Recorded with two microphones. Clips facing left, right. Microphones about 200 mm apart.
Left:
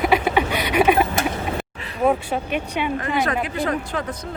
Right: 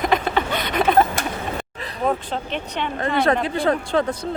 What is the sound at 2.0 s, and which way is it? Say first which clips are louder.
Speech: left 3 dB; 10° left (ahead or behind).